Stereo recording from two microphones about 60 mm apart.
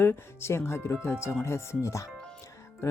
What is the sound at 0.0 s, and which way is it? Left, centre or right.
Speech, left.